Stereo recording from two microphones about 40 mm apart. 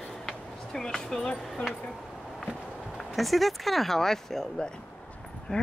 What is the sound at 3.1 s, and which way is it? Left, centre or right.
Speech, centre.